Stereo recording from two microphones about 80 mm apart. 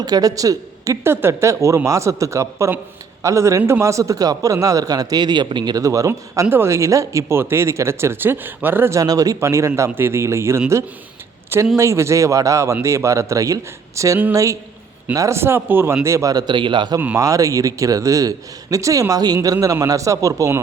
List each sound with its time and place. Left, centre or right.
0.0 s speech: right
1.0 s speech: right
5.7 s speech: right
9.0 s speech: right
16.3 s a man's voice: right
17.2 s speech: right